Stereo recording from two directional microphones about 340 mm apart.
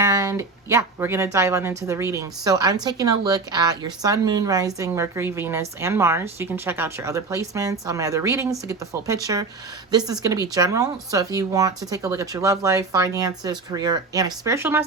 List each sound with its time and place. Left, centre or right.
0.0 s speech: centre